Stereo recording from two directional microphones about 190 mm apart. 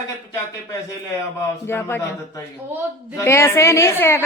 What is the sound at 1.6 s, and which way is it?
Speech, 10° left (ahead or behind).